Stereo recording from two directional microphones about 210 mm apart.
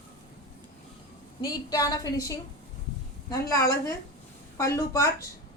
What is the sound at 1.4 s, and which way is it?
A woman's voice, 20° left (ahead or behind).